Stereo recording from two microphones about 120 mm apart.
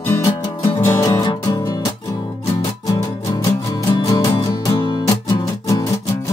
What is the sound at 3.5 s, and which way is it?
Music, 30° left (ahead or behind).